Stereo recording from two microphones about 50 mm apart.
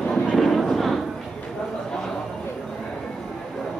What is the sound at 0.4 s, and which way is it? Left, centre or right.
Fireworks, centre.